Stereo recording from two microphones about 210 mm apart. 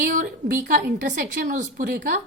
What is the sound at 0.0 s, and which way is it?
A woman's voice, 40° right (ahead or behind).